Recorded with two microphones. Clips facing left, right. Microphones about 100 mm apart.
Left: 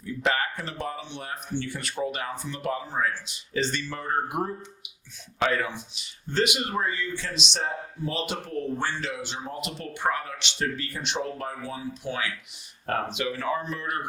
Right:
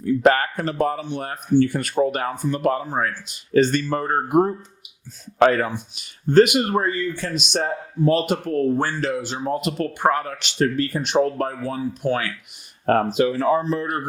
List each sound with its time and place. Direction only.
0.0 s speech: 50° right (ahead or behind); by 13.8 s 35° right (ahead or behind)